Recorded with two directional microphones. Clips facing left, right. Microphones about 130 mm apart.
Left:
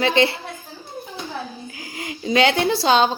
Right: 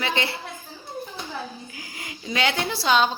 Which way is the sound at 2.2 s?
30° left (ahead or behind).